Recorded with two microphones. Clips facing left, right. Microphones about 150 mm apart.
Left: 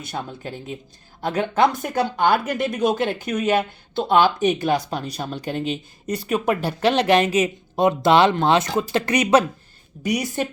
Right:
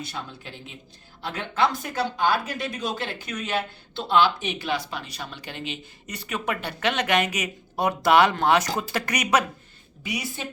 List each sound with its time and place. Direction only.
0.0 s speech: 50° left (ahead or behind); by 9.4 s 25° left (ahead or behind)
10.0 s speech: 45° left (ahead or behind)